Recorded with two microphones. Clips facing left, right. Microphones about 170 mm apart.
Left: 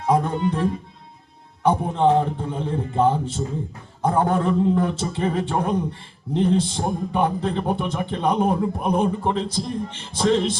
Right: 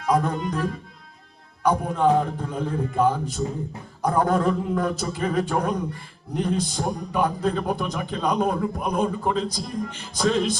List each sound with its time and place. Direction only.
0.0 s a man's voice: 30° left (ahead or behind)